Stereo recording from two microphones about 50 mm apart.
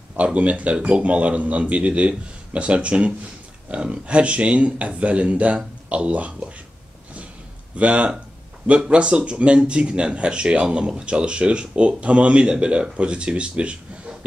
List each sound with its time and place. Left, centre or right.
0.2 s speech: right
7.7 s speech: right